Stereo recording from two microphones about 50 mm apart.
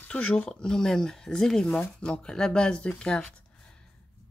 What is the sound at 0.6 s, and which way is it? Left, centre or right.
Speech, centre.